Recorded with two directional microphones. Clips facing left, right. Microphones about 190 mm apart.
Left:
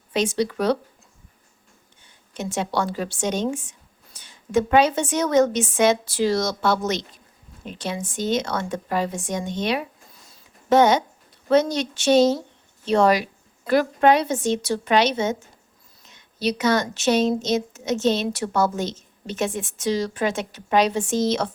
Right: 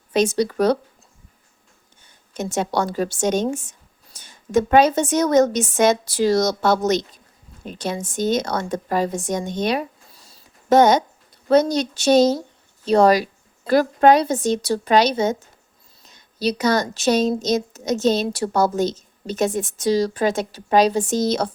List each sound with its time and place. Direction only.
0.1 s speech: 45° right (ahead or behind)
2.3 s speech: 45° right (ahead or behind)
9.5 s a sound: 40° right (ahead or behind)
11.4 s speech: 40° right (ahead or behind)